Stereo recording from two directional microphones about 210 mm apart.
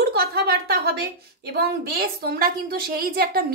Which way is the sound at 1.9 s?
45° right (ahead or behind).